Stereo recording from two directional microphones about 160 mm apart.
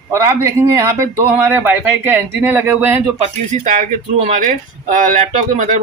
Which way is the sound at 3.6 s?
50° right (ahead or behind).